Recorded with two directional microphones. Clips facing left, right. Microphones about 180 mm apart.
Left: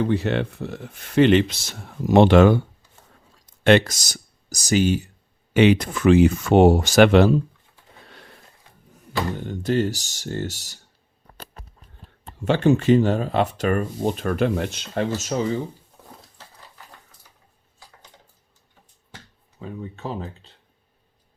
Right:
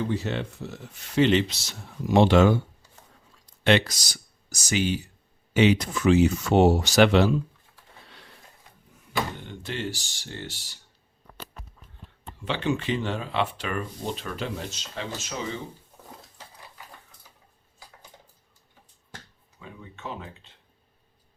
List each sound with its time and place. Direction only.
0.0 s speech: 60° left (ahead or behind)
3.6 s speech: 50° left (ahead or behind)
5.5 s speech: 55° left (ahead or behind)
8.0 s a sound: 50° left (ahead or behind)
9.4 s speech: 45° left (ahead or behind)
12.5 s speech: 45° left (ahead or behind)
15.2 s speech: 40° left (ahead or behind)
19.5 s speech: 35° left (ahead or behind)